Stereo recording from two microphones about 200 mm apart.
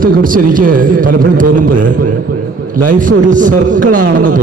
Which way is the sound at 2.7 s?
40° right (ahead or behind).